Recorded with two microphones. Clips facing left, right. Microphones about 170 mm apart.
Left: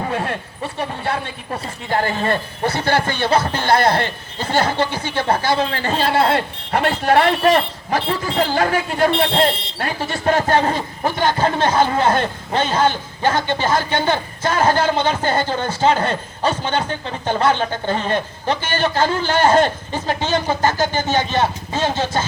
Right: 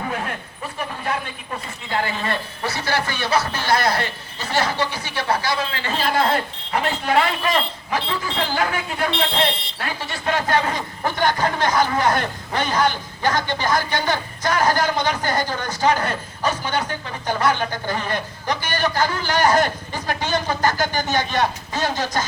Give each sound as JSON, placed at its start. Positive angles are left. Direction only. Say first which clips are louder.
{"t": 1.9, "sound": "a man's voice", "louder": "left 5 dB", "side_deg": 45}
{"t": 5.5, "sound": "speech", "louder": "left 6 dB", "side_deg": 40}
{"t": 6.0, "sound": "speech", "louder": "left 3 dB", "side_deg": 30}
{"t": 6.7, "sound": "a man's voice", "louder": "left 5 dB", "side_deg": 50}
{"t": 11.0, "sound": "speech", "louder": "left 2 dB", "side_deg": 20}